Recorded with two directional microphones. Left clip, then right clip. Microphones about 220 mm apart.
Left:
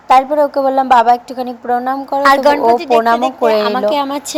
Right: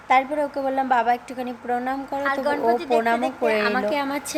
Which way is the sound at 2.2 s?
40° left (ahead or behind).